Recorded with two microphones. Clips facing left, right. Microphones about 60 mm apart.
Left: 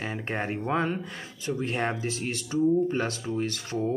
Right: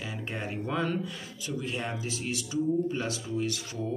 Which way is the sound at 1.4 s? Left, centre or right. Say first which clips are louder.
Left 6 dB; left.